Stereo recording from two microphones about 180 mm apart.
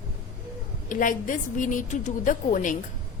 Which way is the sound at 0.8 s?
50° left (ahead or behind).